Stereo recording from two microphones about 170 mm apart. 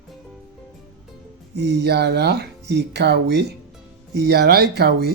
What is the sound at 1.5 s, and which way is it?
Speech, 85° right.